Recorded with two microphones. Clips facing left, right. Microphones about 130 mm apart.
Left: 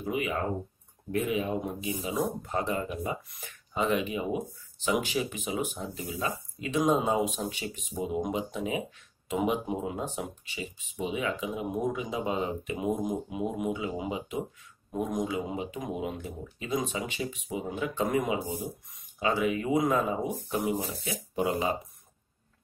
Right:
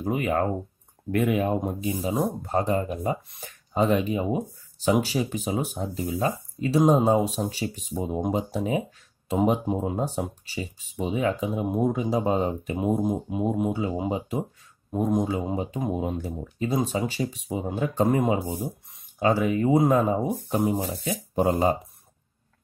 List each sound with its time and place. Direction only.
0.0 s speech: 45° right (ahead or behind)
1.1 s speech: 60° right (ahead or behind); by 21.7 s 40° right (ahead or behind)